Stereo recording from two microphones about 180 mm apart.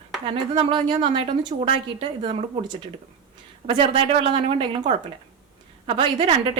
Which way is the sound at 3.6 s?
30° right (ahead or behind).